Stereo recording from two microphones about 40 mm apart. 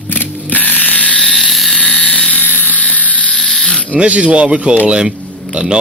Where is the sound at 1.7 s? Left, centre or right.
Left.